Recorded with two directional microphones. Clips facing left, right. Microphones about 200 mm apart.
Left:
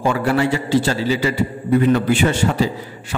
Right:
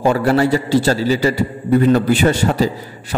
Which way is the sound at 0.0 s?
40° right (ahead or behind).